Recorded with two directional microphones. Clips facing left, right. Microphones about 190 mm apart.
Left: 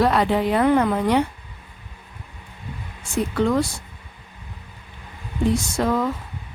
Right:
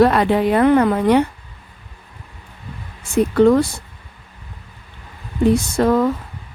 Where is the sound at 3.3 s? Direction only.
55° right (ahead or behind).